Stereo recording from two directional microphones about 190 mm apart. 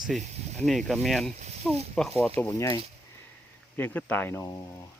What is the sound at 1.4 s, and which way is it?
Speech, 35° right (ahead or behind).